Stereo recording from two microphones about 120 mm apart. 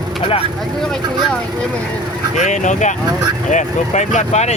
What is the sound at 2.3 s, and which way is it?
Speech, 85° left.